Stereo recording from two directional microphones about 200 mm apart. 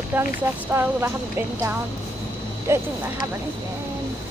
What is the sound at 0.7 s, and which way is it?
Speech, 10° right (ahead or behind).